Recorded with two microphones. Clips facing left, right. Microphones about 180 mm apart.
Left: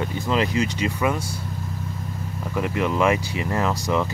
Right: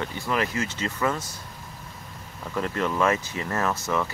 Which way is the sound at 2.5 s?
15° left (ahead or behind).